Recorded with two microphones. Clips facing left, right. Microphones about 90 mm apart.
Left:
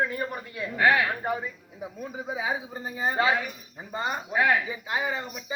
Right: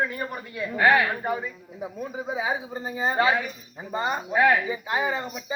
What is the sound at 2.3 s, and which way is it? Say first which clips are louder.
A man's voice: right 2 dB; 5° right (ahead or behind).